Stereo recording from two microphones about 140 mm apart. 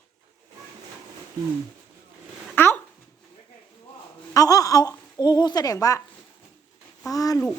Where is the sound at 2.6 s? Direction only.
15° left (ahead or behind).